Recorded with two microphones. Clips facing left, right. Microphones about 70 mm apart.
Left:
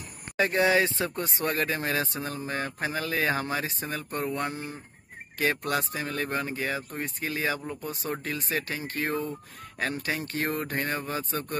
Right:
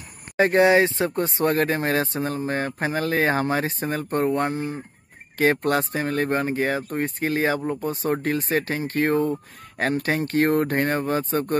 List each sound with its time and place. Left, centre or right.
0.4 s speech: right
1.1 s speech: right
5.4 s speech: right